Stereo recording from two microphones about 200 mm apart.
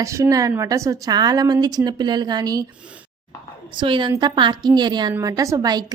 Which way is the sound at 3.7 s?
25° right (ahead or behind).